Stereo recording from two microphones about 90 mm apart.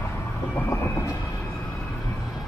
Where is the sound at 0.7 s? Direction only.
25° left (ahead or behind).